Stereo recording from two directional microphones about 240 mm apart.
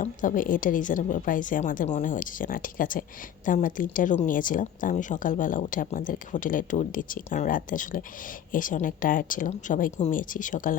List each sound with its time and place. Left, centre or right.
0.0 s speech: left